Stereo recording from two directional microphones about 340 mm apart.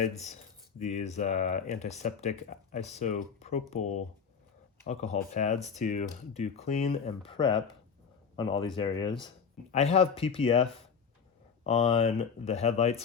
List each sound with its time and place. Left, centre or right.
0.8 s speech: left